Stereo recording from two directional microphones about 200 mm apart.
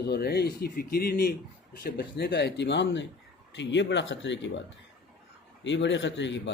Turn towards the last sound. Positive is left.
turn(degrees=65)  # may be behind; listen again after turning